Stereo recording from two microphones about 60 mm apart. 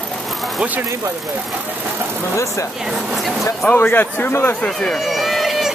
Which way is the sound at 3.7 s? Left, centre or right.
Left.